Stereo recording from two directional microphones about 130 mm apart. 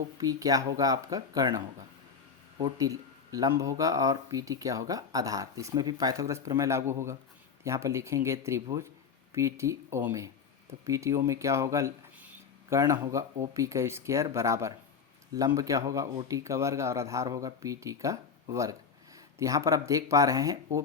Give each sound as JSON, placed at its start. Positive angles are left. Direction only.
{"t": 0.2, "sound": "a man's voice", "side_deg": -25}
{"t": 12.2, "sound": "a sound", "side_deg": -10}
{"t": 12.8, "sound": "speech", "side_deg": -25}